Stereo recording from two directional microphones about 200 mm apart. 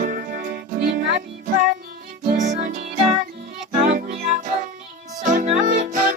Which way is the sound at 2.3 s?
45° right (ahead or behind).